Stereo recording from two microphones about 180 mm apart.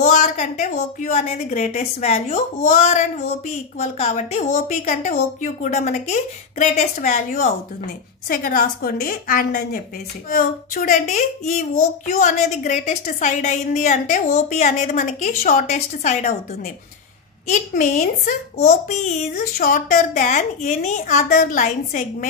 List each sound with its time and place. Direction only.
0.0 s a woman's voice: 40° left (ahead or behind)
17.5 s a woman's voice: 45° left (ahead or behind)